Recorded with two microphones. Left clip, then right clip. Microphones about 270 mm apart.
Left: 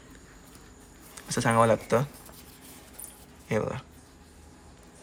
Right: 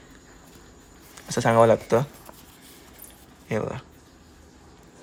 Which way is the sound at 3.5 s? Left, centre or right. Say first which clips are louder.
Right 1 dB; centre.